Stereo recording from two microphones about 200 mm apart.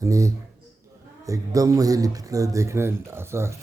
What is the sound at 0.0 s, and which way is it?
Speech, 15° right (ahead or behind).